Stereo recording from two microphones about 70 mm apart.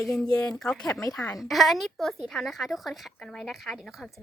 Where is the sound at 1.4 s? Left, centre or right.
Centre.